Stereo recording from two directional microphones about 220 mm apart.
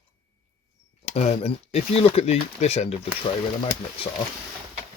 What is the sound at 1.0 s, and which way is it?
Speech, 30° left (ahead or behind).